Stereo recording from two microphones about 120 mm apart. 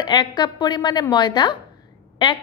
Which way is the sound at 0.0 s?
40° left (ahead or behind).